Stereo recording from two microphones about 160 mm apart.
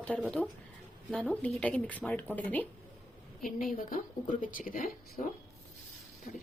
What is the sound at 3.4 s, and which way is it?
Speech, 60° left (ahead or behind).